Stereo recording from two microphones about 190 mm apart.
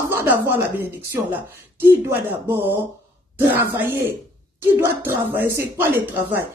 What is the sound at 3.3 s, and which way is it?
Speech, 10° right (ahead or behind).